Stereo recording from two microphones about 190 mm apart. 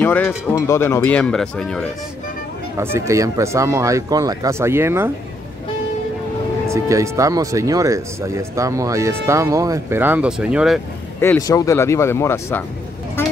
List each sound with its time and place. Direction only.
0.0 s speech: 10° left (ahead or behind)
2.8 s speech: 15° right (ahead or behind)
6.7 s speech: 15° right (ahead or behind)
11.1 s speech: 15° left (ahead or behind)